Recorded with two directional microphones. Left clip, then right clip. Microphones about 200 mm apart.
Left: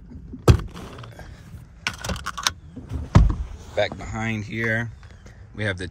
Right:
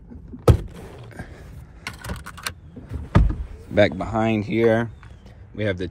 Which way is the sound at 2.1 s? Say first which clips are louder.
Left 7 dB; 25° left (ahead or behind).